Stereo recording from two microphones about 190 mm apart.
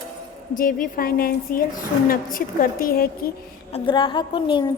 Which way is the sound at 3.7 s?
25° left (ahead or behind).